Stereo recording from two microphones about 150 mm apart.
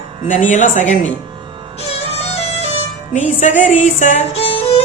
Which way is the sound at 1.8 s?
45° left (ahead or behind).